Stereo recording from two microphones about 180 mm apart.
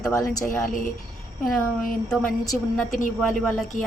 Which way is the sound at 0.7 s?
45° left (ahead or behind).